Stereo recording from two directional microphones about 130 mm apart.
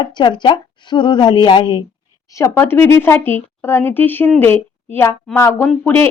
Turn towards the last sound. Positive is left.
turn(degrees=15)  # may be behind; listen again after turning